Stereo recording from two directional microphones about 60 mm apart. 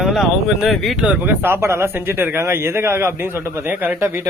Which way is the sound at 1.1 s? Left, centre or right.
Right.